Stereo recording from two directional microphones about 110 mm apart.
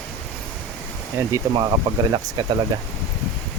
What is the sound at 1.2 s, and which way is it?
Speech, 30° right (ahead or behind).